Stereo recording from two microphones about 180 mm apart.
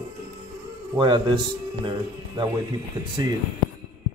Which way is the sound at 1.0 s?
25° right (ahead or behind).